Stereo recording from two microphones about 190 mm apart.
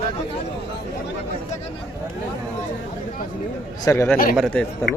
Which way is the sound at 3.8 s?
15° left (ahead or behind).